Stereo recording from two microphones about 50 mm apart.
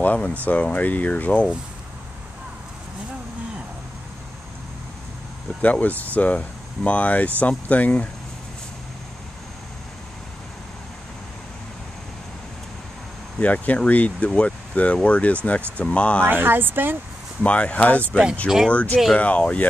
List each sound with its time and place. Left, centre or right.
0.0 s speech: left
5.6 s speech: left
13.4 s speech: left
16.3 s speech: right
17.4 s speech: left